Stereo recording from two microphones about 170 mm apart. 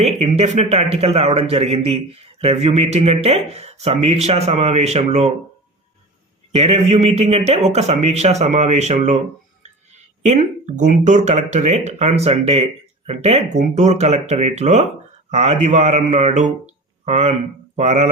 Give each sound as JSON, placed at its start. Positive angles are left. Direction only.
{"t": 0.0, "sound": "a man's voice", "side_deg": -40}
{"t": 6.6, "sound": "a man's voice", "side_deg": -40}
{"t": 10.2, "sound": "a man's voice", "side_deg": -45}